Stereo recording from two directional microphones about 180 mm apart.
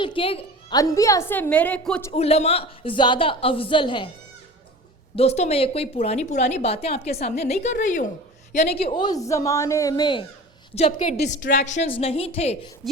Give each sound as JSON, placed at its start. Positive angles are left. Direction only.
{"t": 0.0, "sound": "a woman's voice", "side_deg": 30}
{"t": 0.8, "sound": "a woman's voice", "side_deg": 20}
{"t": 2.1, "sound": "a woman's voice", "side_deg": 35}
{"t": 5.1, "sound": "a woman's voice", "side_deg": 35}
{"t": 12.8, "sound": "speech", "side_deg": 0}